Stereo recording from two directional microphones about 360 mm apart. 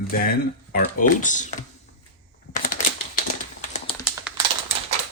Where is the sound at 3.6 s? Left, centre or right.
Centre.